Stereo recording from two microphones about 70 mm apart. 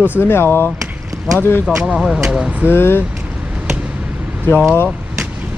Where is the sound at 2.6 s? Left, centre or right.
Left.